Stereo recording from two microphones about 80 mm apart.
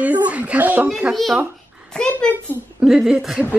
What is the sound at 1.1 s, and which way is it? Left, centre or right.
Speech, centre.